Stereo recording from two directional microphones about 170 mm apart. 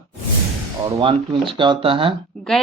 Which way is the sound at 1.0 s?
30° right (ahead or behind).